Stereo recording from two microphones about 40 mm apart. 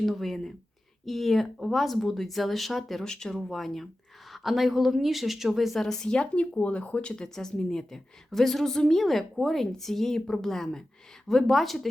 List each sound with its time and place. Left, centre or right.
0.0 s a woman's voice: centre
3.0 s a woman's voice: centre
3.3 s speech: centre
5.8 s a woman's voice: centre
6.3 s speech: left
7.0 s a woman's voice: centre